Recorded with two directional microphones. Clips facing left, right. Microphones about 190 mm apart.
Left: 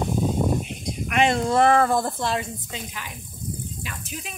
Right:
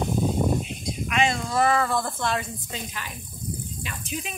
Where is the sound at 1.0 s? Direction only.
55° left (ahead or behind); by 2.4 s 30° left (ahead or behind).